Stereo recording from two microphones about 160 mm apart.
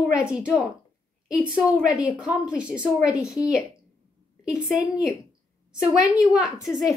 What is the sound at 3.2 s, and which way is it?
A woman's voice, 5° right (ahead or behind).